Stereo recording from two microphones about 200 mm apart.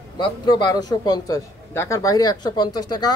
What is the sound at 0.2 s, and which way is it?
A man's voice, 20° left (ahead or behind).